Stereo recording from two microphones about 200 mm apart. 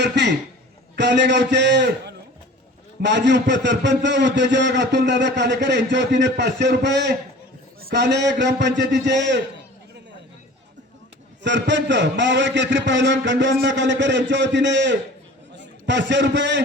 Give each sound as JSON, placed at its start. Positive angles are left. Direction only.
{"t": 0.0, "sound": "a sound", "side_deg": -60}
{"t": 0.9, "sound": "a man's voice", "side_deg": -60}
{"t": 11.4, "sound": "a man's voice", "side_deg": -65}